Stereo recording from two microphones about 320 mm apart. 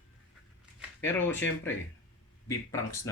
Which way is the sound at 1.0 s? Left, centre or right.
Centre.